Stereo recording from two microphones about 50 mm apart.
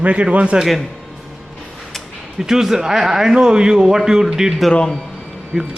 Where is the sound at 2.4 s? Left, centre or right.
Centre.